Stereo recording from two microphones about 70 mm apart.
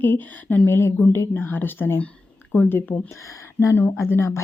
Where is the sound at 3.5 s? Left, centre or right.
Left.